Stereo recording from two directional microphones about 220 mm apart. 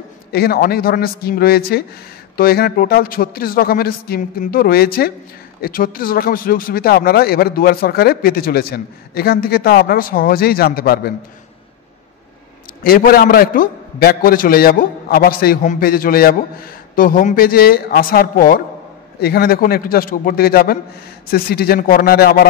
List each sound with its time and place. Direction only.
0.3 s speech: 45° left (ahead or behind)
12.8 s a man's voice: 40° left (ahead or behind)